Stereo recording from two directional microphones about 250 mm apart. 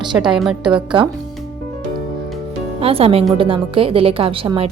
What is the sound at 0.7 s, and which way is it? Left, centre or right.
Speech, centre.